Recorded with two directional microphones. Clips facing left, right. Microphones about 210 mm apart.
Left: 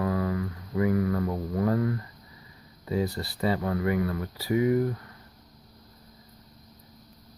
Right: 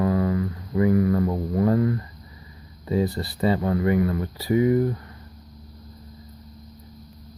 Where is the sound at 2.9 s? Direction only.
25° right (ahead or behind).